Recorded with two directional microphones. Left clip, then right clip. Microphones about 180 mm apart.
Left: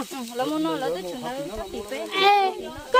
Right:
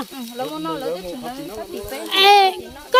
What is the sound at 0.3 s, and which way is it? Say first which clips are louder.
Speech: left 1 dB; 35° left (ahead or behind).